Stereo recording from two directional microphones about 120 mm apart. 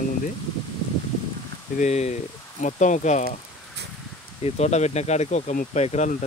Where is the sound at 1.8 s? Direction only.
65° left (ahead or behind).